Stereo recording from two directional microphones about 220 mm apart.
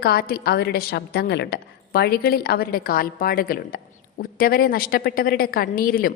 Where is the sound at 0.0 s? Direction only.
45° left (ahead or behind).